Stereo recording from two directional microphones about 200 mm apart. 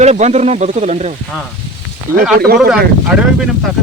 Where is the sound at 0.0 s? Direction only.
35° right (ahead or behind).